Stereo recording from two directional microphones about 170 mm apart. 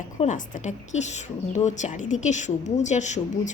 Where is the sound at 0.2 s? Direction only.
45° left (ahead or behind).